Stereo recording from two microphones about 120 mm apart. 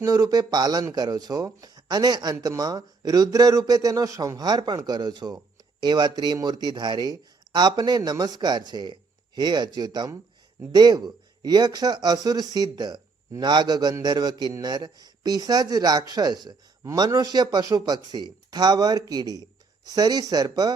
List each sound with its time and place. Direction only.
0.0 s speech: 30° right (ahead or behind)